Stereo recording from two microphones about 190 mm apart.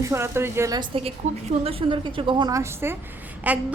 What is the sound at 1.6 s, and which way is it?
A woman's voice, 30° right (ahead or behind).